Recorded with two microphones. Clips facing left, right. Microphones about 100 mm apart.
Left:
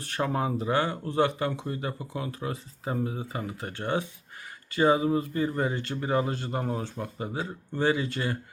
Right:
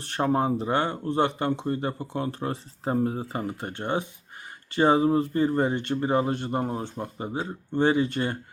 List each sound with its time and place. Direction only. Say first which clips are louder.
0.2 s speech: right 4 dB; 30° right (ahead or behind)
3.6 s speech: left 2 dB; 20° right (ahead or behind)
4.7 s speech: right 2 dB; 30° right (ahead or behind)